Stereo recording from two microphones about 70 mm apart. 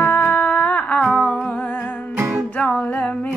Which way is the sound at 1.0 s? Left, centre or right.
Centre.